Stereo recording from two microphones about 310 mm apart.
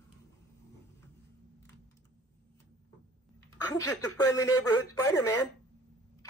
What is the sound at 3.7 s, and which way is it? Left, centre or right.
Speech, centre.